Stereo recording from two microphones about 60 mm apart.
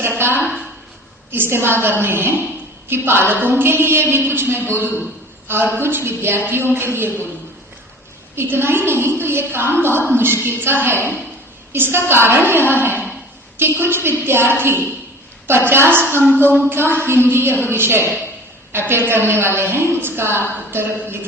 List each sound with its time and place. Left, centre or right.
0.2 s a woman's voice: right
0.4 s a sound: centre
1.3 s a woman's voice: right
8.4 s a woman's voice: right
15.4 s a woman's voice: right